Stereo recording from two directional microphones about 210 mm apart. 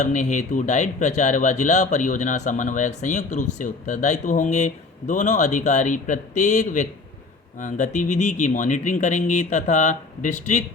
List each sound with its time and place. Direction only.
0.0 s speech: 35° left (ahead or behind)